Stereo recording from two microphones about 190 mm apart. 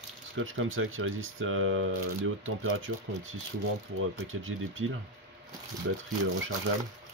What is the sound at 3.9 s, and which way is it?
Speech, 90° right.